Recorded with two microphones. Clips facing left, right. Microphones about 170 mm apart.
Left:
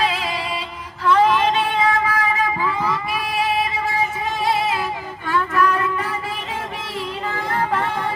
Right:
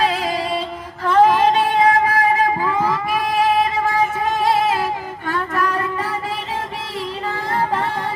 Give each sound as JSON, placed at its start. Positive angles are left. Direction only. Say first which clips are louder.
{"t": 0.0, "sound": "music", "louder": "right 3 dB", "side_deg": -40}
{"t": 1.0, "sound": "child singing", "louder": "right 3 dB", "side_deg": -45}
{"t": 5.3, "sound": "a sound", "louder": "left 2 dB", "side_deg": -40}